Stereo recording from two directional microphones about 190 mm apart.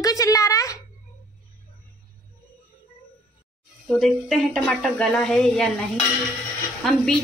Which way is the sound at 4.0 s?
Centre (ahead or behind).